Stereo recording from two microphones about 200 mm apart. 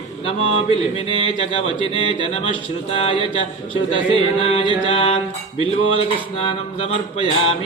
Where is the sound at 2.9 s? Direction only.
30° left (ahead or behind).